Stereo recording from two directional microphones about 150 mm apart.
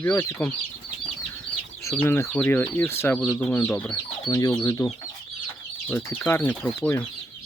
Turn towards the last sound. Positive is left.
turn(degrees=15)  # may be behind; listen again after turning